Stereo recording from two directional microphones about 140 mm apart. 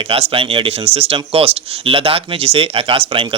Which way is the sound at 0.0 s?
40° right (ahead or behind).